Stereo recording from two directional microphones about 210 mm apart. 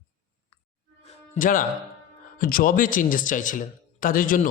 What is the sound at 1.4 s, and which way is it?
Speech, 40° left (ahead or behind).